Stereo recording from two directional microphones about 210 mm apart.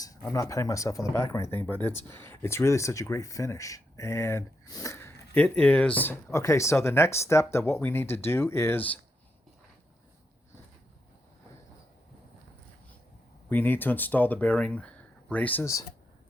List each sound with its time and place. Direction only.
0.0 s speech: 15° left (ahead or behind)
13.5 s speech: 10° left (ahead or behind)